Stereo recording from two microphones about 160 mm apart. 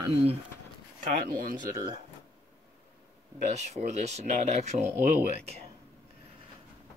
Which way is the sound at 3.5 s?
45° right (ahead or behind).